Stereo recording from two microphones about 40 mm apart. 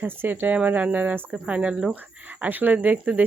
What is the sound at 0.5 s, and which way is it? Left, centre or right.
Speech, right.